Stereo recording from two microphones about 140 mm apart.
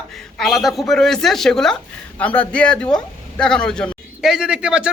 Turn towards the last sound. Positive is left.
turn(degrees=-5)  # may be behind; listen again after turning